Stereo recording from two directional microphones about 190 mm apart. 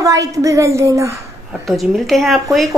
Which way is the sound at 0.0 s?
15° right (ahead or behind).